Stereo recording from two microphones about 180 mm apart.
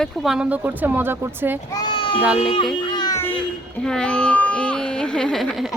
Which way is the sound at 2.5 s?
25° left (ahead or behind).